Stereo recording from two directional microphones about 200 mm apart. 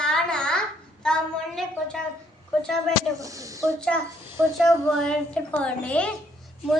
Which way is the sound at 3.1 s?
15° right (ahead or behind).